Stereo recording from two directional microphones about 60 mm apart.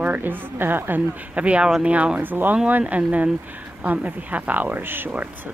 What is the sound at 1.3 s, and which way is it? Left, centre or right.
Speech, right.